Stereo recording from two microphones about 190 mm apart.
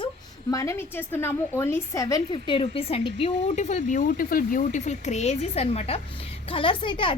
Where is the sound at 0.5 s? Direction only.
15° left (ahead or behind).